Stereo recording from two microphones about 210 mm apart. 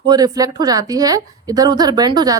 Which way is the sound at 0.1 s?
15° right (ahead or behind).